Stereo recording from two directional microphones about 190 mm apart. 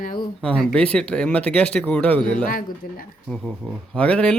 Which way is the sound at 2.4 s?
50° left (ahead or behind).